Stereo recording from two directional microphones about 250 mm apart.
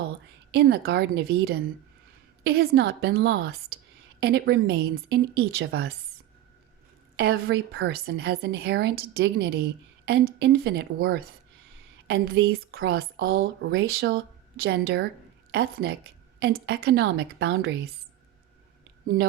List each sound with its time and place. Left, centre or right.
0.5 s a woman's voice: right
7.2 s a woman's voice: right